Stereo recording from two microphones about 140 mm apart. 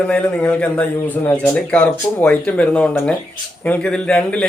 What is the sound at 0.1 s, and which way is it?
Speech, 10° left (ahead or behind).